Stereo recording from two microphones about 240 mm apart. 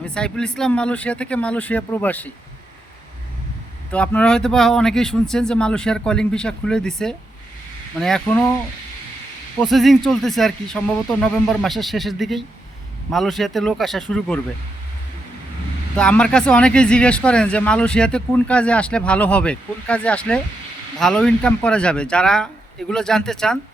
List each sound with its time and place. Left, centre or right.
0.1 s speech: centre
3.9 s speech: centre
9.6 s speech: centre
16.0 s speech: centre